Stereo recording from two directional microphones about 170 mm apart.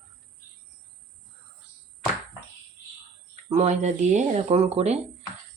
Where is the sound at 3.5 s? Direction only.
40° right (ahead or behind).